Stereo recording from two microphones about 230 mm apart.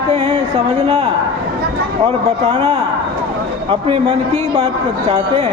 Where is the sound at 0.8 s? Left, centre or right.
Centre.